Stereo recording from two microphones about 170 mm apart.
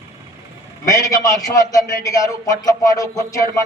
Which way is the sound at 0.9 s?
20° left (ahead or behind).